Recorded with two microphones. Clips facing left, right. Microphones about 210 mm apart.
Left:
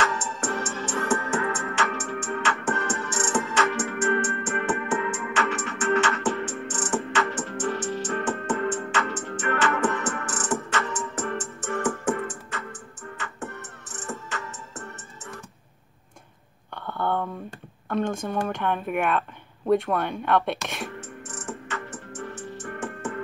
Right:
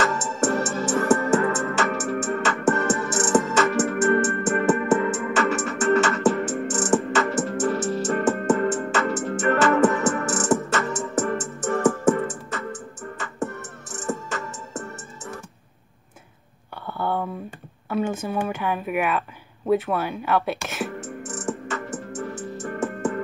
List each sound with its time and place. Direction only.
0.0 s music: 45° right (ahead or behind)
13.9 s music: 40° right (ahead or behind)
16.8 s a sound: 5° right (ahead or behind)
22.3 s music: 45° right (ahead or behind)